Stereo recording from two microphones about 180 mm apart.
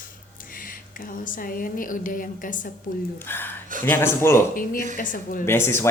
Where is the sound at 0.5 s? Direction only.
50° left (ahead or behind).